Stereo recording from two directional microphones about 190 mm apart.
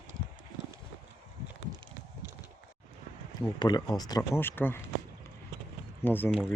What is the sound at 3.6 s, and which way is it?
Speech, 20° left (ahead or behind).